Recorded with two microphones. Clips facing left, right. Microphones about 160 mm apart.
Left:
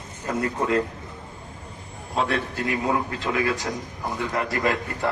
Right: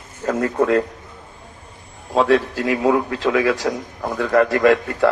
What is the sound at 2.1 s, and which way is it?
Speech, 90° right.